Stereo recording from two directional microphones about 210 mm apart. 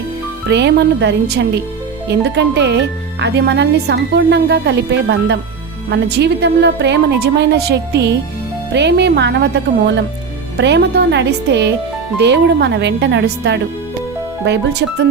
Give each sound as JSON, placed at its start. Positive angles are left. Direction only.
{"t": 0.4, "sound": "speech", "side_deg": -55}